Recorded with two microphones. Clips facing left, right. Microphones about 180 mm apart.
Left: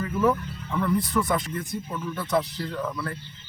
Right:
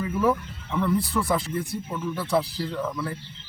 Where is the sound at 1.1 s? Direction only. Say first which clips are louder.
Even; 5° right (ahead or behind).